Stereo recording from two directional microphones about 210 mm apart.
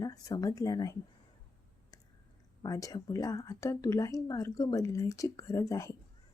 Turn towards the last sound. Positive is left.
turn(degrees=15)  # may be behind; listen again after turning